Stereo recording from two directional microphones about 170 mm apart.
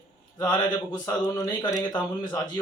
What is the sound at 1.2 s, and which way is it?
Speech, 20° left (ahead or behind).